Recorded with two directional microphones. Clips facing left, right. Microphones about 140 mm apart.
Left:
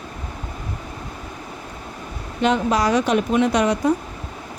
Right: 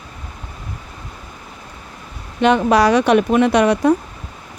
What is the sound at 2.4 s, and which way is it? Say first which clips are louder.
Speech: right 5 dB; 70° right (ahead or behind).